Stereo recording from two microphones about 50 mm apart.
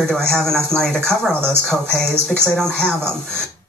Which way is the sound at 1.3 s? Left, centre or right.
Right.